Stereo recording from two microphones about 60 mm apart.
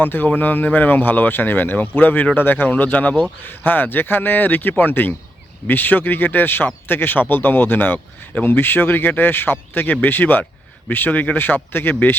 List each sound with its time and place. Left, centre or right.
0.0 s speech: left